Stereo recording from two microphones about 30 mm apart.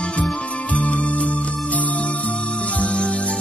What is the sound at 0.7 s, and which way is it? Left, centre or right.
Music, left.